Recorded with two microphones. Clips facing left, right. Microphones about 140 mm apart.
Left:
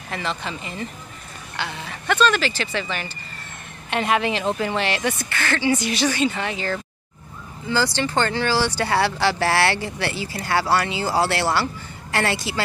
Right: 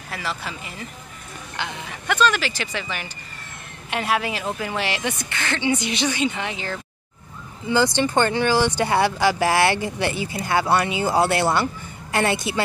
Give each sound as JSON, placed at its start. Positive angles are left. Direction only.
{"t": 0.1, "sound": "speech", "side_deg": -5}